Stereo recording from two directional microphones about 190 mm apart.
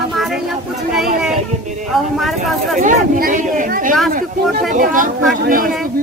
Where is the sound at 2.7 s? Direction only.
45° right (ahead or behind).